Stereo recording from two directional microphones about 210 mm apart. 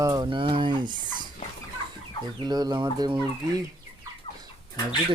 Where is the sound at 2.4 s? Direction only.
20° right (ahead or behind).